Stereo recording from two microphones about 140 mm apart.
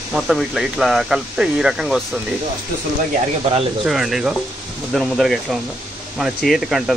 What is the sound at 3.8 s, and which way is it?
Speech, centre (ahead or behind).